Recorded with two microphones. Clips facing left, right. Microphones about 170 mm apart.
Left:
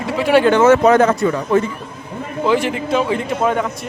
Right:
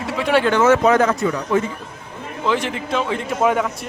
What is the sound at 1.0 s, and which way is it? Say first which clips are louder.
Speech: left 3 dB; 45° left (ahead or behind).